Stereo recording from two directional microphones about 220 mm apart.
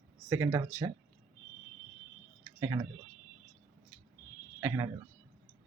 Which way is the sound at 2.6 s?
15° right (ahead or behind).